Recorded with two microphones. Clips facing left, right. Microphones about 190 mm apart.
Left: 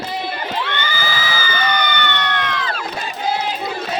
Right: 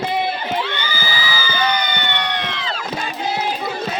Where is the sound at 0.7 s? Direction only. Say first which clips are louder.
Left 2 dB; 55° left (ahead or behind).